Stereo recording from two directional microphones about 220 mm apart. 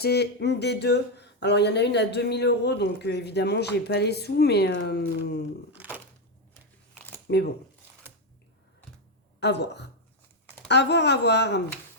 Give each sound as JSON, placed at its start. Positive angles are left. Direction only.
{"t": 0.0, "sound": "speech", "side_deg": 50}
{"t": 5.7, "sound": "a sound", "side_deg": -5}
{"t": 7.3, "sound": "speech", "side_deg": 45}
{"t": 9.4, "sound": "speech", "side_deg": 50}